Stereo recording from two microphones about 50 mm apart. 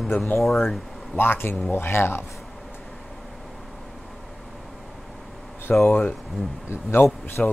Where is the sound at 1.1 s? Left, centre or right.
Left.